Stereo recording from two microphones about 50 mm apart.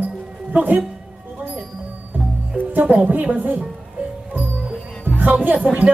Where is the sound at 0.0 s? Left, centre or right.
Right.